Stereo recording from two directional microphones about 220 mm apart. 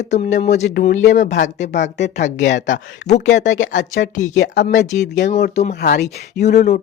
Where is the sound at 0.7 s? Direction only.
45° left (ahead or behind).